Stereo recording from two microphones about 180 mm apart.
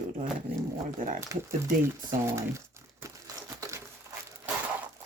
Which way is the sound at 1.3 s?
20° right (ahead or behind).